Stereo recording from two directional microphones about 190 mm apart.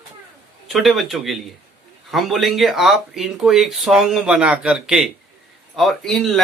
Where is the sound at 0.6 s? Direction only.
Centre (ahead or behind).